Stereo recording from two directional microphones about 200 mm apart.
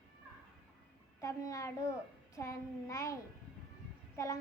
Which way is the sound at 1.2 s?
15° left (ahead or behind).